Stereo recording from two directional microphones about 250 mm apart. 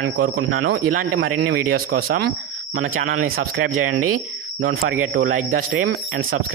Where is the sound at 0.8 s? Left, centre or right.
Right.